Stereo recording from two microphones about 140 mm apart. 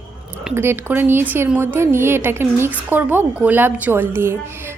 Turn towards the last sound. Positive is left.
turn(degrees=-15)  # may be behind; listen again after turning